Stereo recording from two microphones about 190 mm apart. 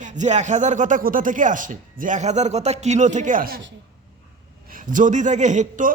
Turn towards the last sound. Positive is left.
turn(degrees=-40)  # may be behind; listen again after turning